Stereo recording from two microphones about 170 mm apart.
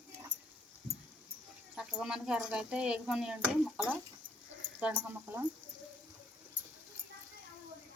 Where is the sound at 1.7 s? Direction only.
5° right (ahead or behind).